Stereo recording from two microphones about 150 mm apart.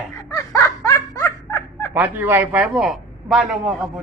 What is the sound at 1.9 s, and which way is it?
A man's voice, 10° right (ahead or behind).